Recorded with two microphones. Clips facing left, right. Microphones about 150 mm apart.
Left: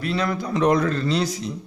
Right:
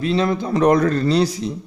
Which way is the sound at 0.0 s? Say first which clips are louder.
Right 5 dB; 25° right (ahead or behind).